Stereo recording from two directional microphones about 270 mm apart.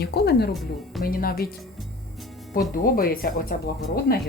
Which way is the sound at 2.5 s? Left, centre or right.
Left.